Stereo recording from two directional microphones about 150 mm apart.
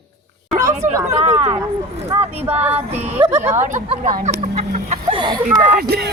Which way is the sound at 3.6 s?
55° right (ahead or behind).